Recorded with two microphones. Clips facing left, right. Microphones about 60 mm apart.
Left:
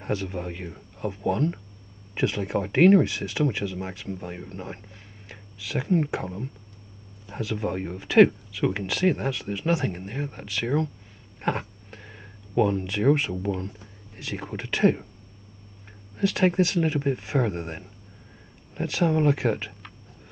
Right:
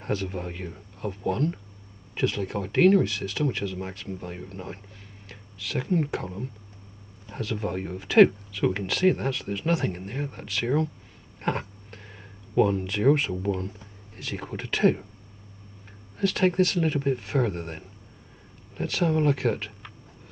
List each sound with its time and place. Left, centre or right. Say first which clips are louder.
0.0 s speech: left 1 dB; centre
3.6 s speech: left 1 dB; centre
16.2 s speech: even; centre